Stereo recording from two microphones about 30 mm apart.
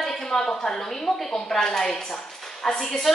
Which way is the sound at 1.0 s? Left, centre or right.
Centre.